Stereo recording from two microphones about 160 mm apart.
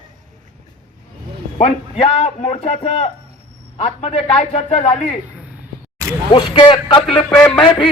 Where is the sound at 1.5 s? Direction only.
35° left (ahead or behind).